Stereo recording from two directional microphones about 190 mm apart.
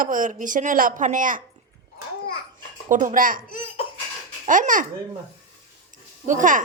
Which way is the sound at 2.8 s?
45° right (ahead or behind).